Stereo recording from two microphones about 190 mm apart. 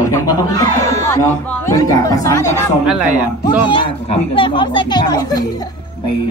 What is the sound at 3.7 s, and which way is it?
Speech, 25° left (ahead or behind).